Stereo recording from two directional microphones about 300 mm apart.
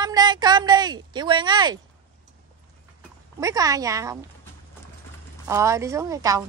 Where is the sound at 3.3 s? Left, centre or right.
Centre.